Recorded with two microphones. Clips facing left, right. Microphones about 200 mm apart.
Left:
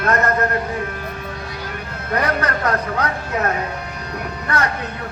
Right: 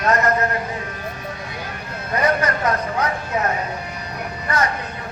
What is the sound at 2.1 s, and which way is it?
A man's voice, 65° left (ahead or behind).